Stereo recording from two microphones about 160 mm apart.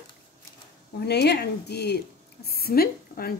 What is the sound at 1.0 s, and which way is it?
Speech, 90° left.